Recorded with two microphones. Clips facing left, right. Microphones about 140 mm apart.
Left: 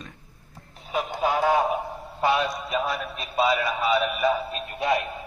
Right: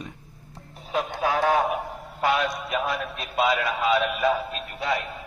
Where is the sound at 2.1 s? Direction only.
15° left (ahead or behind).